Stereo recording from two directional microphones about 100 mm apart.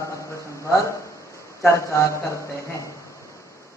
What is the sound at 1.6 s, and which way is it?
Speech, 30° left (ahead or behind).